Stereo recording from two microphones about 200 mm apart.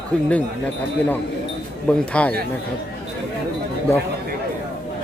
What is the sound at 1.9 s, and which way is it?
Speech, 5° left (ahead or behind).